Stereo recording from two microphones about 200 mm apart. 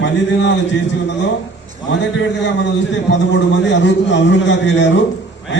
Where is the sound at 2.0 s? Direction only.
60° left (ahead or behind).